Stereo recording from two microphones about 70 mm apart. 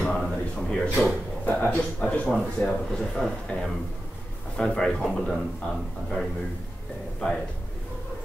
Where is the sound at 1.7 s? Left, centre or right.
Centre.